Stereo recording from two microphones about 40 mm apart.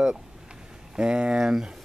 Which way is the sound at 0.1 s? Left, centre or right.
Right.